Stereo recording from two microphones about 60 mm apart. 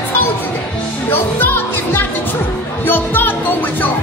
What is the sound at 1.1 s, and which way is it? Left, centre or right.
Music, left.